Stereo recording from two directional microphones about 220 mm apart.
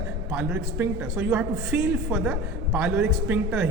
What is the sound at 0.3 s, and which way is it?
A man's voice, 10° right (ahead or behind).